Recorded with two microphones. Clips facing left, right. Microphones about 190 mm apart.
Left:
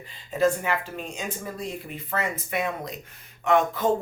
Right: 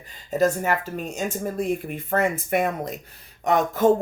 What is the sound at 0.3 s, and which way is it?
Speech, 40° right (ahead or behind).